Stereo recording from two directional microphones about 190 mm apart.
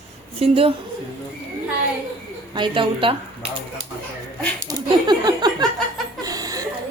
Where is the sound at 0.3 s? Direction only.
30° right (ahead or behind).